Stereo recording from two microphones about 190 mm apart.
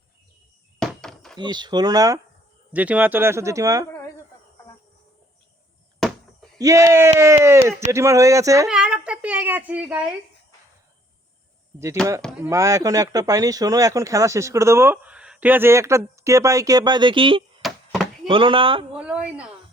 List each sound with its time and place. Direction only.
0.8 s a sound: centre (ahead or behind)
1.4 s speech: 25° right (ahead or behind)
2.7 s speech: 10° right (ahead or behind)
6.6 s speech: 15° right (ahead or behind)
8.6 s speech: 5° right (ahead or behind)
12.4 s speech: 15° right (ahead or behind)
17.6 s knock: centre (ahead or behind)
18.3 s speech: 25° right (ahead or behind)
18.9 s a woman's voice: 5° right (ahead or behind)